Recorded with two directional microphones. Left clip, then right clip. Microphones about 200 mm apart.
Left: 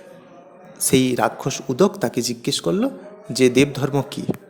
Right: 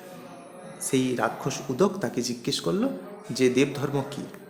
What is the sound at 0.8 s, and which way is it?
Speech, 40° left (ahead or behind).